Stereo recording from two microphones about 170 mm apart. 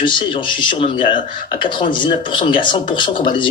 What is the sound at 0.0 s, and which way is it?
A man's voice, 30° left (ahead or behind).